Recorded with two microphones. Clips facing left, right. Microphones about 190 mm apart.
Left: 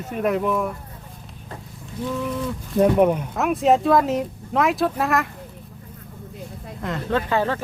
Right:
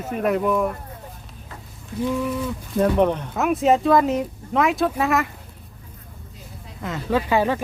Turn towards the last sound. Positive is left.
turn(degrees=-15)  # may be behind; listen again after turning